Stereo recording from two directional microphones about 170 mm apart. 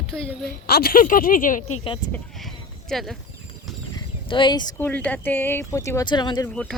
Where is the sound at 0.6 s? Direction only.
65° left (ahead or behind).